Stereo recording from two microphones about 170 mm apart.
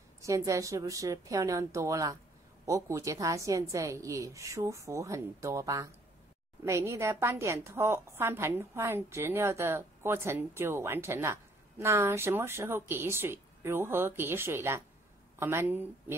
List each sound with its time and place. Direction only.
0.2 s a woman's voice: 20° right (ahead or behind)